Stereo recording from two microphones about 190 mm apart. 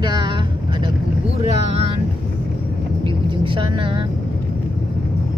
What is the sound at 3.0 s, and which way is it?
Vehicle, 25° right (ahead or behind).